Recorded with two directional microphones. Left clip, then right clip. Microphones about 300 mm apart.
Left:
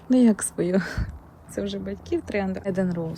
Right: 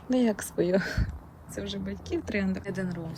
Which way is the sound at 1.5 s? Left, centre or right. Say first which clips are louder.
Left 6 dB; centre.